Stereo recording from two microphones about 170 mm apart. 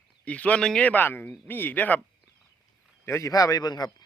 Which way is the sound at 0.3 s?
10° left (ahead or behind).